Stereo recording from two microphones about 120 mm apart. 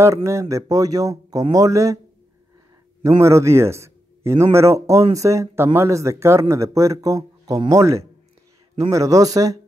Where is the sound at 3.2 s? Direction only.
25° right (ahead or behind).